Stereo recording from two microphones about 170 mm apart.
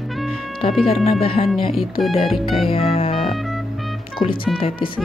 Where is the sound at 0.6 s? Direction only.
35° left (ahead or behind).